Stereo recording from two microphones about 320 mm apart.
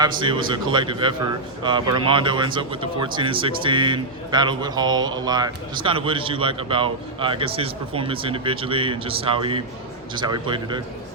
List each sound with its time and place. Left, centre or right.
0.0 s speech: centre